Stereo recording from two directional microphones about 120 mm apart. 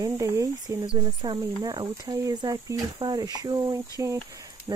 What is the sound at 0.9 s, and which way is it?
Speech, 35° right (ahead or behind).